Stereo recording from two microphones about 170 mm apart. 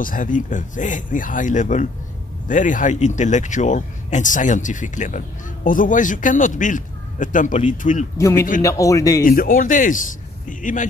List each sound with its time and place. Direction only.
0.0 s speech: 50° left (ahead or behind)
8.2 s a man's voice: 15° left (ahead or behind)
9.2 s speech: 55° left (ahead or behind)